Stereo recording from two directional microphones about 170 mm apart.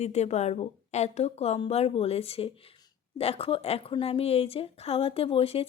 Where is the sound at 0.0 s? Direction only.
40° left (ahead or behind).